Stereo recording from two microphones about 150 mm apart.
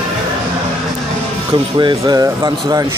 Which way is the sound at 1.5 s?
30° right (ahead or behind).